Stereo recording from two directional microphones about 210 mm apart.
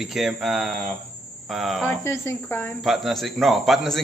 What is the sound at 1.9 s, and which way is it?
Speech, 10° left (ahead or behind).